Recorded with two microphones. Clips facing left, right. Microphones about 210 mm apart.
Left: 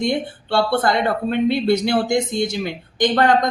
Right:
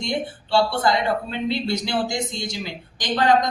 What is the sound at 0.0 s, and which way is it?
A woman's voice, 55° left (ahead or behind).